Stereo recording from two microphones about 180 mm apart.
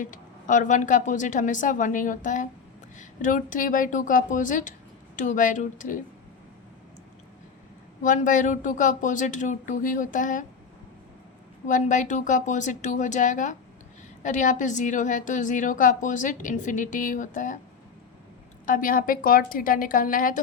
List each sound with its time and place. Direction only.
0.0 s a woman's voice: 45° left (ahead or behind)
8.0 s a woman's voice: 45° left (ahead or behind)
11.6 s a woman's voice: 45° left (ahead or behind)
18.6 s a woman's voice: 50° left (ahead or behind)